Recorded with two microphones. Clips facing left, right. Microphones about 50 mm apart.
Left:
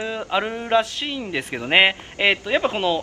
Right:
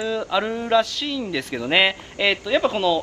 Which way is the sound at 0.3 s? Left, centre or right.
Centre.